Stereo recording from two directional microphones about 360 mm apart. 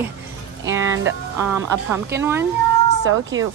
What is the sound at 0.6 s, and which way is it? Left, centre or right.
A woman's voice, centre.